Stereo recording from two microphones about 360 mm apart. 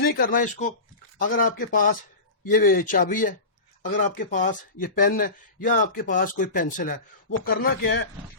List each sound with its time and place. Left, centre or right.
0.0 s speech: left